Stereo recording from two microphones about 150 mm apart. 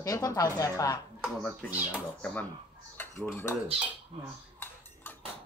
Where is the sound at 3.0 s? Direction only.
15° left (ahead or behind).